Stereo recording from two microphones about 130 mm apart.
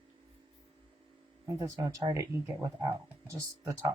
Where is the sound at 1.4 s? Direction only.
25° right (ahead or behind).